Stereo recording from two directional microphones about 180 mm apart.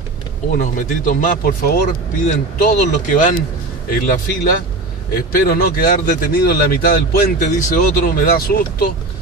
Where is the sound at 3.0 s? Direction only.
45° left (ahead or behind).